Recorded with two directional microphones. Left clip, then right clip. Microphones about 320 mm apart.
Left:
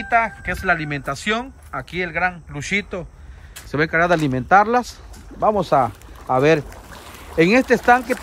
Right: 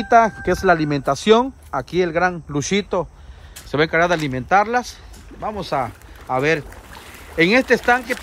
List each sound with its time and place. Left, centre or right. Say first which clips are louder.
0.0 s speech: right 5 dB; centre